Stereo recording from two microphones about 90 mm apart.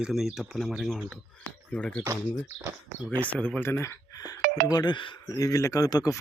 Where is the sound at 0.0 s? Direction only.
5° right (ahead or behind).